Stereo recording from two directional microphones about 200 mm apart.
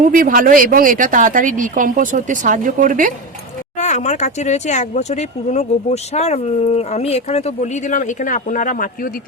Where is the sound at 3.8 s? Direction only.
35° left (ahead or behind).